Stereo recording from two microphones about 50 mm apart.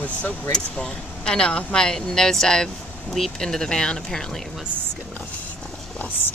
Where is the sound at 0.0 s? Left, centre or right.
Left; by 4.5 s centre.